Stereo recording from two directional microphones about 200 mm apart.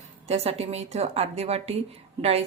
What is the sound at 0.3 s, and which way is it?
A woman's voice, 30° right (ahead or behind).